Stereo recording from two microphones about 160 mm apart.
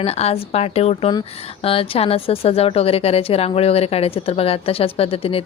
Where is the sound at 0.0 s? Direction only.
40° left (ahead or behind).